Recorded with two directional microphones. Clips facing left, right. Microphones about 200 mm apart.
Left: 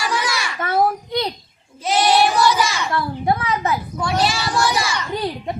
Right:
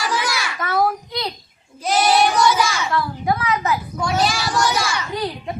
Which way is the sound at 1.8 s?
Centre (ahead or behind).